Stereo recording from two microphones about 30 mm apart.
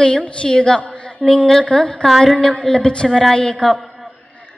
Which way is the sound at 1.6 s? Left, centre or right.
Left.